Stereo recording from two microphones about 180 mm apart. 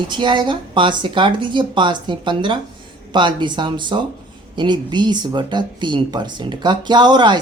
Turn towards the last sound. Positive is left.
turn(degrees=-25)  # may be behind; listen again after turning